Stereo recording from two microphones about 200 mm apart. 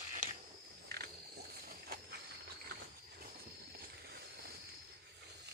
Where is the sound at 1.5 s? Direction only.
50° right (ahead or behind).